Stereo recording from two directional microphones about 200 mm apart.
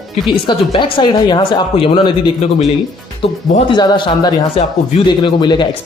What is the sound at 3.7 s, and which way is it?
Speech, 20° left (ahead or behind).